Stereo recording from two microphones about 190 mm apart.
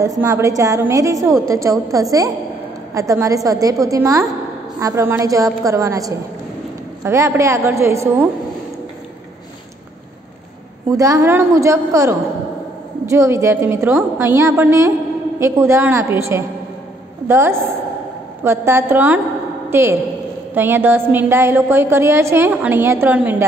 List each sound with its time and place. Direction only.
0.2 s a woman's voice: 15° right (ahead or behind)
10.9 s a woman's voice: 15° right (ahead or behind)